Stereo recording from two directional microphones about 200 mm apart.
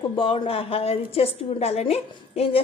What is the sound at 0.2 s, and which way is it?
A woman's voice, 25° left (ahead or behind).